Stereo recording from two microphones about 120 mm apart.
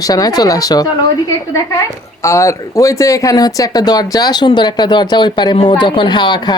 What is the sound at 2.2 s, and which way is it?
Speech, 25° left (ahead or behind).